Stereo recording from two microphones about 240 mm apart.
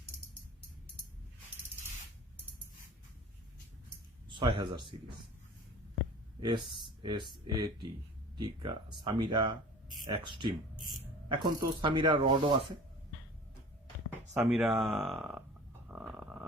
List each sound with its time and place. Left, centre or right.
4.3 s speech: right
6.4 s speech: centre
14.1 s speech: centre
15.9 s stomach rumble: centre